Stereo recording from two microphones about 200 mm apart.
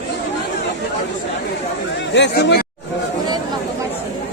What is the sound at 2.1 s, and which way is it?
Speech, 60° left (ahead or behind).